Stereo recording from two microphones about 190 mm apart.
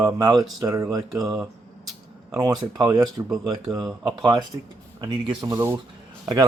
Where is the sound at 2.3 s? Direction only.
20° right (ahead or behind).